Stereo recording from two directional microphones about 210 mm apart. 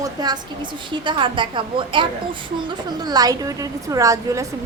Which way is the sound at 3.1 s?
20° right (ahead or behind).